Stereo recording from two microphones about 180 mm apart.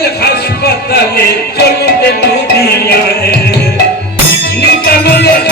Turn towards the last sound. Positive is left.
turn(degrees=65)  # may be behind; listen again after turning